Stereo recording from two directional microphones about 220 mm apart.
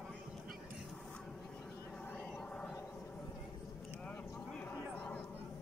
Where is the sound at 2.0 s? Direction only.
5° left (ahead or behind).